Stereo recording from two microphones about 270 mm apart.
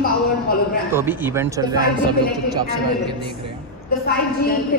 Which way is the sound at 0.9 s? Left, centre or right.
Centre.